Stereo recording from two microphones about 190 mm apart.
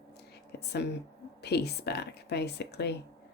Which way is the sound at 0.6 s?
60° left (ahead or behind).